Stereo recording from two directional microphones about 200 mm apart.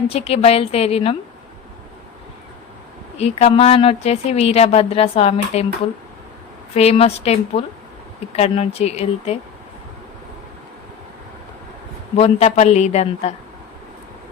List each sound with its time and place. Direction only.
0.1 s a woman's voice: 30° left (ahead or behind)
3.2 s a woman's voice: 30° left (ahead or behind)
6.7 s a woman's voice: 30° left (ahead or behind)
12.1 s a woman's voice: 30° left (ahead or behind)